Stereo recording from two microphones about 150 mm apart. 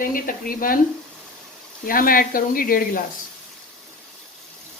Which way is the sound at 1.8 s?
70° left (ahead or behind).